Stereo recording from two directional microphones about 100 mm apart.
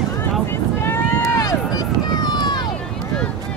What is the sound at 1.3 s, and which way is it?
Run, 40° left (ahead or behind).